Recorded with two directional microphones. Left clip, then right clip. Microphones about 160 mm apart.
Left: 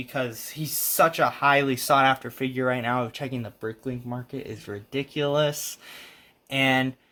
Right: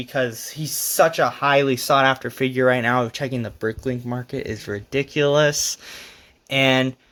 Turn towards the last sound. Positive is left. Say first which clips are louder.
# right 5 dB
turn(degrees=-30)  # may be behind; listen again after turning